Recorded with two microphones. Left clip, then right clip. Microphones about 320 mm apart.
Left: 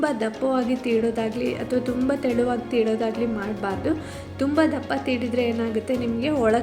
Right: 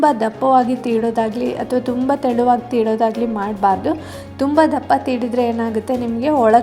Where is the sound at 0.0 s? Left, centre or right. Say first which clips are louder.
Right 9 dB; centre.